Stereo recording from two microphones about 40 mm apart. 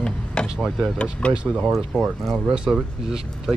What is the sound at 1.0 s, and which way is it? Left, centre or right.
Speech, left.